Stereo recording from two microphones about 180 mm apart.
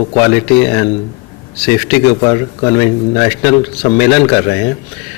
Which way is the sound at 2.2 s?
25° left (ahead or behind).